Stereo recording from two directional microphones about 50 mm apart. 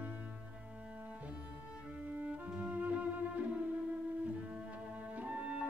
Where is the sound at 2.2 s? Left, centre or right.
Right.